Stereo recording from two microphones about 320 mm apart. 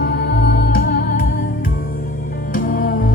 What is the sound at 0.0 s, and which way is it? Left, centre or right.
Music, left.